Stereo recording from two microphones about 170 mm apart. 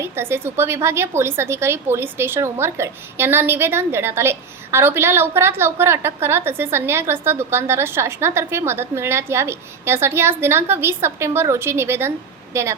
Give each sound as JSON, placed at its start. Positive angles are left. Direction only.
{"t": 0.0, "sound": "a woman's voice", "side_deg": -15}